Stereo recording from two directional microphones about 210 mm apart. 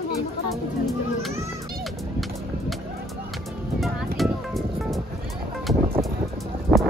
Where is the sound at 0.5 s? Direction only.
Centre (ahead or behind).